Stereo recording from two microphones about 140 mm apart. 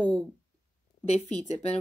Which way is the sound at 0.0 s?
10° left (ahead or behind).